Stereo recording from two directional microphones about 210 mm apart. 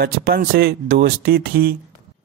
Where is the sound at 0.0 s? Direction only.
50° right (ahead or behind).